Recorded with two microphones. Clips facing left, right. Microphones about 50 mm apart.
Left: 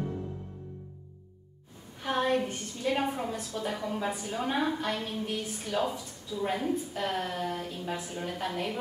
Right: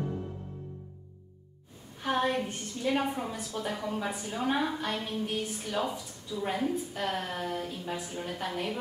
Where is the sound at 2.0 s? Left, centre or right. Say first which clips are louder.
Left 1 dB; centre.